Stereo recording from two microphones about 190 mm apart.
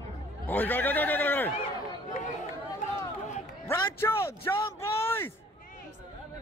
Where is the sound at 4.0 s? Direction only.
15° left (ahead or behind).